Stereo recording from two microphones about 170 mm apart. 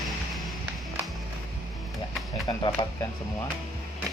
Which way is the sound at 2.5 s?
25° left (ahead or behind).